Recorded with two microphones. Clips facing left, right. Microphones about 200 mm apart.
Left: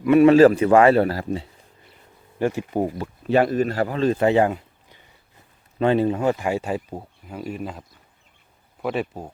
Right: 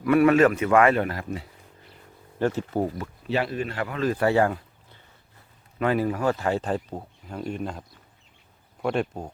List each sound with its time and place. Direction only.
0.0 s a man's voice: 20° left (ahead or behind)
2.4 s speech: 15° left (ahead or behind)
3.2 s a man's voice: 50° left (ahead or behind); by 9.3 s 5° left (ahead or behind)